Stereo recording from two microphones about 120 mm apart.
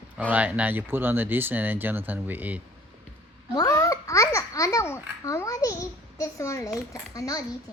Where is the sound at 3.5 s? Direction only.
30° left (ahead or behind).